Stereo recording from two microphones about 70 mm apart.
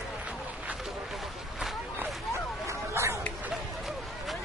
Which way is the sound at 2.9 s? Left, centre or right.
Right.